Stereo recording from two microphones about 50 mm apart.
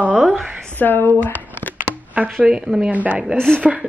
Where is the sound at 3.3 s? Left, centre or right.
Centre.